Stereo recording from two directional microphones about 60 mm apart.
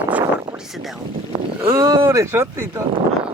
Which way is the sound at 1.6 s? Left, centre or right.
Right.